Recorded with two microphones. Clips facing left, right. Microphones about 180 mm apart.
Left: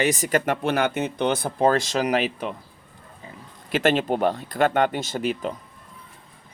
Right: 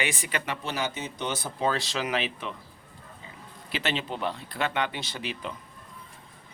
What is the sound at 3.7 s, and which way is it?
Speech, 50° left (ahead or behind).